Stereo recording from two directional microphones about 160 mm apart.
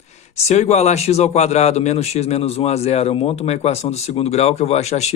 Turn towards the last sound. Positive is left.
turn(degrees=45)  # may be behind; listen again after turning